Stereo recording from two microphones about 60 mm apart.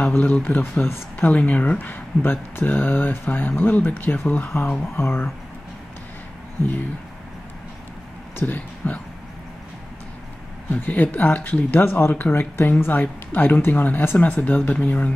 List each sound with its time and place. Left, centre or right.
0.2 s speech: left
1.2 s speech: left
8.4 s speech: left
10.7 s speech: left
12.7 s speech: left